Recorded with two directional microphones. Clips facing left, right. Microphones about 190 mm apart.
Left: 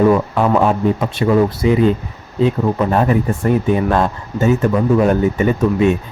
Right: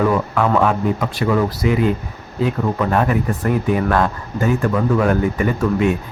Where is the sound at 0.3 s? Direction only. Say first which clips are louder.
Left 2 dB; 20° left (ahead or behind).